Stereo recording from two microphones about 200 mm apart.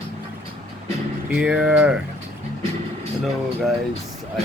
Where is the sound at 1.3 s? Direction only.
5° right (ahead or behind).